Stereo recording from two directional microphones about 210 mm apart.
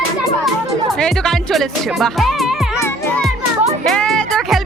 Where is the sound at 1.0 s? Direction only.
Centre (ahead or behind).